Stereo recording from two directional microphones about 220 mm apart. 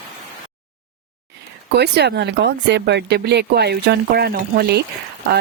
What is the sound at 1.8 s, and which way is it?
Speech, 50° right (ahead or behind).